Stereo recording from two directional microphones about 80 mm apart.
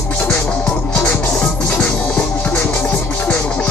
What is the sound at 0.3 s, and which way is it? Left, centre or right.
Music, centre.